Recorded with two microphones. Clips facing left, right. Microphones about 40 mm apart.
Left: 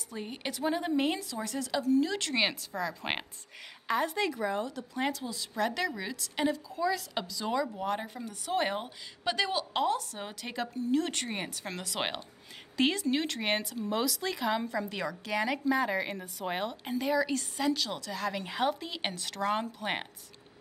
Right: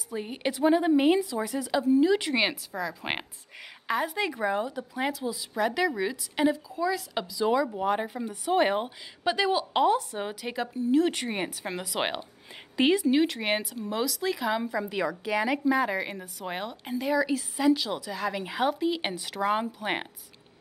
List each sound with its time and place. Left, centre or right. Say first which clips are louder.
0.1 s a woman's voice: right 7 dB; centre
4.3 s a woman's voice: right 4 dB; centre